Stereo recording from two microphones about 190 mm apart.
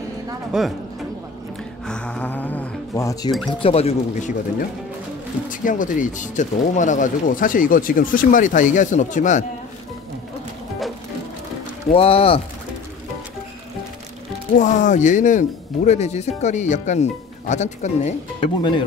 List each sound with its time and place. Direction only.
0.5 s speech: centre (ahead or behind)
1.9 s music: 5° left (ahead or behind)
3.6 s speech: 30° left (ahead or behind)
5.5 s speech: 45° left (ahead or behind)
11.9 s speech: 30° left (ahead or behind)
14.5 s speech: 40° left (ahead or behind)
18.6 s speech: 25° left (ahead or behind)